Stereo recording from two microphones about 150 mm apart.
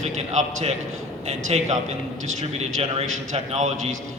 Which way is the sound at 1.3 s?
50° right (ahead or behind).